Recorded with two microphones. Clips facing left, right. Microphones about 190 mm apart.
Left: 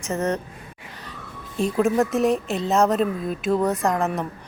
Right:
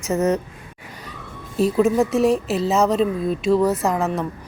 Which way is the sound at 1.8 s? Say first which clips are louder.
Right 2 dB; centre (ahead or behind).